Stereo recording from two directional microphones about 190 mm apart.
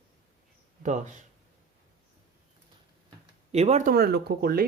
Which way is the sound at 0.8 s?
40° right (ahead or behind).